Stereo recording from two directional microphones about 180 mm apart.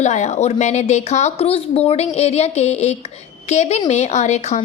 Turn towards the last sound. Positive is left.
turn(degrees=40)  # may be behind; listen again after turning